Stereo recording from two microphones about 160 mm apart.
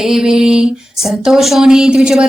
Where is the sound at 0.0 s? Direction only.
5° right (ahead or behind).